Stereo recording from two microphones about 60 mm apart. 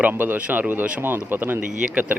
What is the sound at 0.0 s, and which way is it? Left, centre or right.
Speech, right.